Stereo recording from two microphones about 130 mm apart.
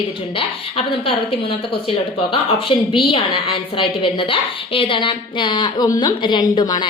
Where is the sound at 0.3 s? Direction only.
45° left (ahead or behind).